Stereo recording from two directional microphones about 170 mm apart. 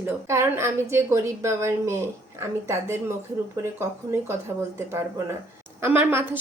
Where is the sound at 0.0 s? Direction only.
15° right (ahead or behind).